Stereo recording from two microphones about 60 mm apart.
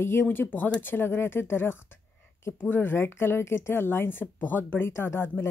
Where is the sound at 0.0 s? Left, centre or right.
Left.